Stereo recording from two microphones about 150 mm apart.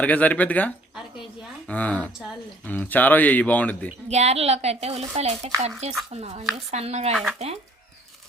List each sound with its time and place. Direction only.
0.0 s speech: 10° left (ahead or behind)
4.1 s a woman's voice: 45° right (ahead or behind)